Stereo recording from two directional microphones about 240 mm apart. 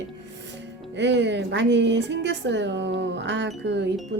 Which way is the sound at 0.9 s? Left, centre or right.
Right.